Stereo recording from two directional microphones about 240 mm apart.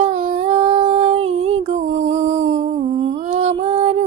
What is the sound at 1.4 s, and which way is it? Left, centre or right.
Music, right.